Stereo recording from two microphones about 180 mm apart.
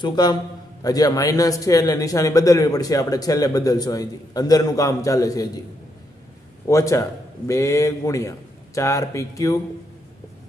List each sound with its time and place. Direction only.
0.0 s a man's voice: 25° left (ahead or behind)
6.7 s a man's voice: 20° left (ahead or behind)